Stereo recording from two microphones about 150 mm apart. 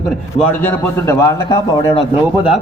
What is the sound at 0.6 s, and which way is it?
A man's voice, 15° left (ahead or behind).